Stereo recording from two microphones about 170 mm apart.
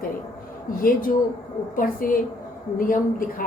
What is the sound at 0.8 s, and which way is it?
A woman's voice, 55° left (ahead or behind).